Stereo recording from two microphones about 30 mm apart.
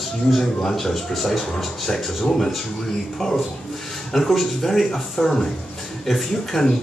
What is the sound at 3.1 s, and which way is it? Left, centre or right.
Speech, centre.